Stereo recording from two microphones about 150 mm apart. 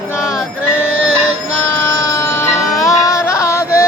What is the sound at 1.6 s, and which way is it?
Music, 15° left (ahead or behind).